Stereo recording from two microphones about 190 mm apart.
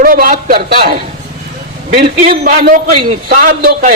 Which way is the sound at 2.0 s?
55° right (ahead or behind).